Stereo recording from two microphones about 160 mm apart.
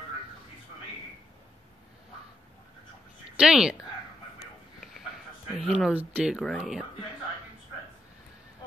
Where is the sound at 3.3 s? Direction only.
5° right (ahead or behind).